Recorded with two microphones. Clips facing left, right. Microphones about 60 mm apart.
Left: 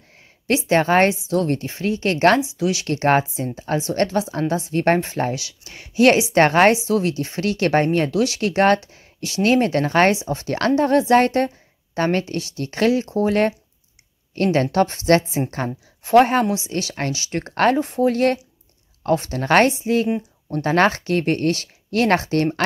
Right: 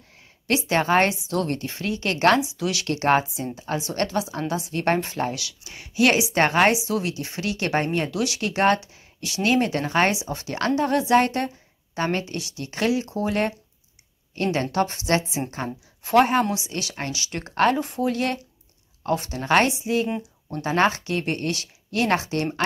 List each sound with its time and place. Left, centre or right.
0.7 s speech: left